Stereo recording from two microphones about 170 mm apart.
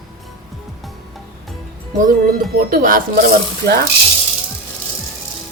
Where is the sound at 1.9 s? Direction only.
55° right (ahead or behind).